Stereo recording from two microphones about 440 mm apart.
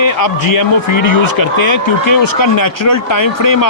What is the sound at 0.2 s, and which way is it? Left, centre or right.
Speech, left.